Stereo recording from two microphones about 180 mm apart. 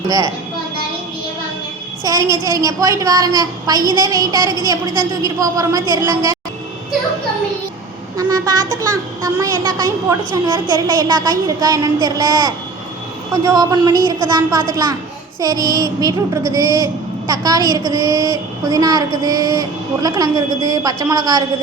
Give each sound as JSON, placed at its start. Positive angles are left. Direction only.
{"t": 2.0, "sound": "a woman's voice", "side_deg": -20}
{"t": 8.1, "sound": "a child's voice", "side_deg": -20}